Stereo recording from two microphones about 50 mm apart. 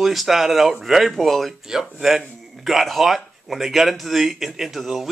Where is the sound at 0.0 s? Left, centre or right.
Centre.